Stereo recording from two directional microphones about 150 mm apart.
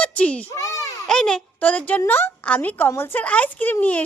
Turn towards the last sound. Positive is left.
turn(degrees=10)  # may be behind; listen again after turning